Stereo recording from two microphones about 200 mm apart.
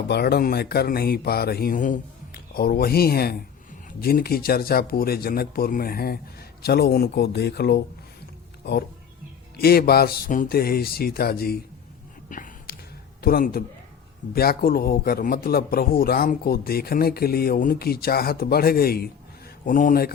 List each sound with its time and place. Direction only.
0.1 s a man's voice: 55° left (ahead or behind)
9.6 s a man's voice: 50° left (ahead or behind)
12.3 s whispering: 45° left (ahead or behind)
13.2 s a man's voice: 50° left (ahead or behind)